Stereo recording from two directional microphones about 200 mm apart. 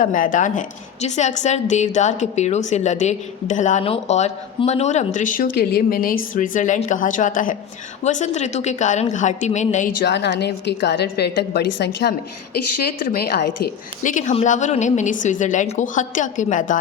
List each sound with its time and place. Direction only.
0.0 s a woman's voice: 40° left (ahead or behind)
10.0 s a woman's voice: 60° left (ahead or behind)
14.0 s a woman's voice: 40° left (ahead or behind)